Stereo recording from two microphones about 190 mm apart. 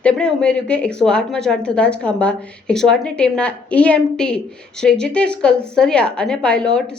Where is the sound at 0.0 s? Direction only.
5° left (ahead or behind).